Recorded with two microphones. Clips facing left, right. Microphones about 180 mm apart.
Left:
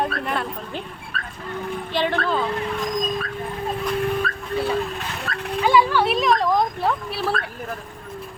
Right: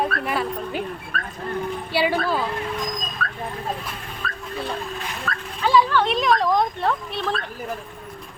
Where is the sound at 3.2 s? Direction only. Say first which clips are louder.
Even; 15° left (ahead or behind).